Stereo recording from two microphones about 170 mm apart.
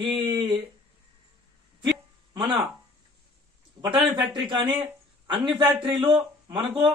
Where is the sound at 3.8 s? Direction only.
30° right (ahead or behind).